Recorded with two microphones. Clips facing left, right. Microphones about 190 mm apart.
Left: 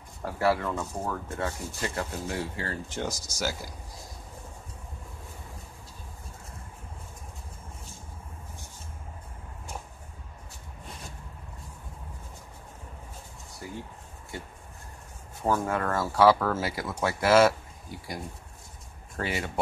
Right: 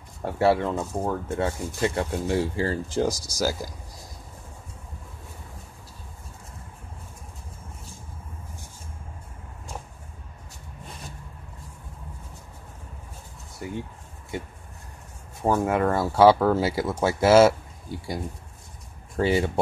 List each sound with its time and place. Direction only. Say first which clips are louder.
0.2 s speech: right 5 dB; 25° right (ahead or behind)
14.3 s a sound: right 7 dB; 20° right (ahead or behind)
15.4 s speech: right 5 dB; 20° right (ahead or behind)
19.1 s speech: right 9 dB; 30° right (ahead or behind)